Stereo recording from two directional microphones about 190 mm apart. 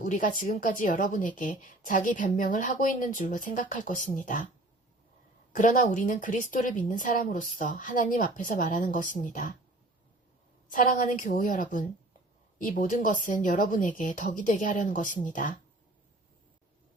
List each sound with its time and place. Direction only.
0.0 s speech: 45° left (ahead or behind)
5.5 s speech: 45° left (ahead or behind)
10.7 s speech: 45° left (ahead or behind)